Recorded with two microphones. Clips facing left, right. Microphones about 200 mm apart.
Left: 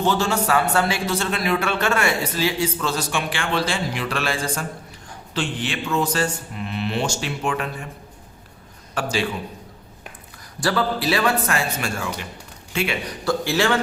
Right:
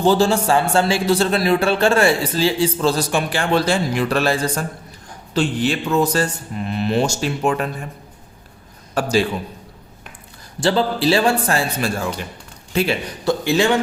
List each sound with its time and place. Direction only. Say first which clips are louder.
0.0 s a man's voice: right 6 dB; 30° right (ahead or behind)
9.0 s a man's voice: right 6 dB; 40° right (ahead or behind)
10.6 s a man's voice: right 4 dB; 25° right (ahead or behind)
13.2 s a man's voice: right 4 dB; 20° right (ahead or behind)